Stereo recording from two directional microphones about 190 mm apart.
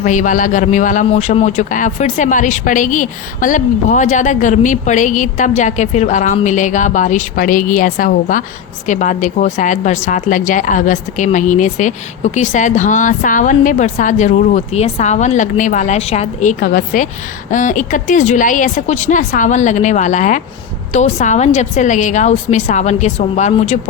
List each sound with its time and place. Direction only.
0.0 s a man's voice: 40° left (ahead or behind)